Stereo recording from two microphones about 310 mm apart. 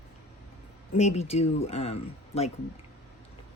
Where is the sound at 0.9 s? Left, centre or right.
Left.